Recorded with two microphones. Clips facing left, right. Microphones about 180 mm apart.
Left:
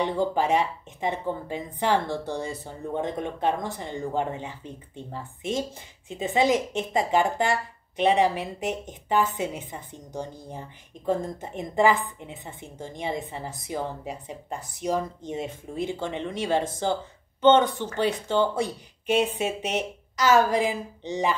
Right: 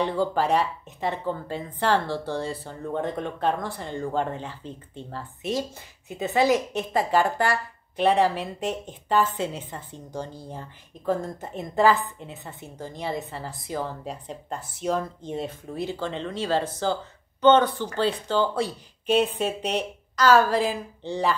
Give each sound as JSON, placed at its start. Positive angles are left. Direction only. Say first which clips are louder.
{"t": 0.0, "sound": "a woman's voice", "louder": "even", "side_deg": 15}
{"t": 11.4, "sound": "a woman's voice", "louder": "right 1 dB", "side_deg": 15}
{"t": 19.2, "sound": "a woman's voice", "louder": "right 1 dB", "side_deg": 10}